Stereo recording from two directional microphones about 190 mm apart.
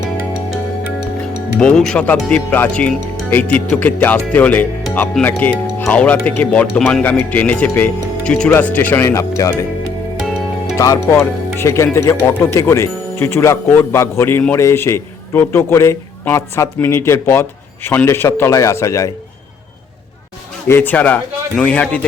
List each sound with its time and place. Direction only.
1.5 s speech: 5° left (ahead or behind)
10.8 s speech: 15° left (ahead or behind)
20.7 s speech: 10° left (ahead or behind)